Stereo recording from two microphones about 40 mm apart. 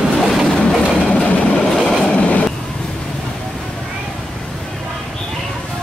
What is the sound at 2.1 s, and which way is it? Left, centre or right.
Train, left.